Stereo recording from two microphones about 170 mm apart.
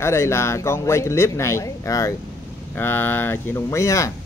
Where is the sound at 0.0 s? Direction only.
15° left (ahead or behind).